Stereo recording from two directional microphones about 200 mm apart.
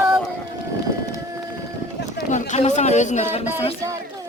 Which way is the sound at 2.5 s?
35° left (ahead or behind).